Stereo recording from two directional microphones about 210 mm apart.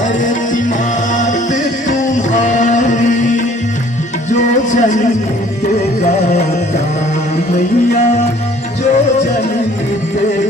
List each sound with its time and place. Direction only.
1.1 s music: 35° left (ahead or behind)